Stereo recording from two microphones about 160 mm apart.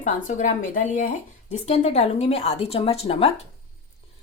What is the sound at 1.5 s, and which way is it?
A woman's voice, 45° left (ahead or behind).